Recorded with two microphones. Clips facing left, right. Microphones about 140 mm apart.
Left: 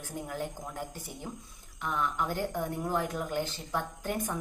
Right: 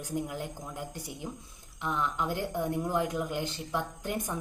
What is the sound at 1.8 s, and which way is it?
A woman's voice, 15° right (ahead or behind).